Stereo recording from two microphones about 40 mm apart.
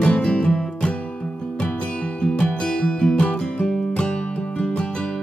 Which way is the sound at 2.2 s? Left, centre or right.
Left.